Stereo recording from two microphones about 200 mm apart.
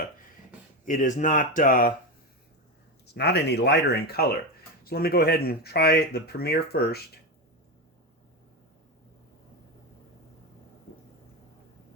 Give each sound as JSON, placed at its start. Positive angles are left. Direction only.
{"t": 0.9, "sound": "speech", "side_deg": 40}
{"t": 3.2, "sound": "speech", "side_deg": 55}